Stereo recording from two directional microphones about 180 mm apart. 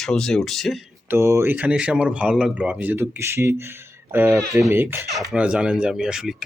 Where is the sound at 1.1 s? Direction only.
15° right (ahead or behind).